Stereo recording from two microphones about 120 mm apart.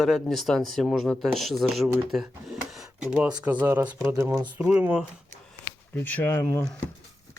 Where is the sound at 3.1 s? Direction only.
10° right (ahead or behind); by 4.5 s 25° right (ahead or behind).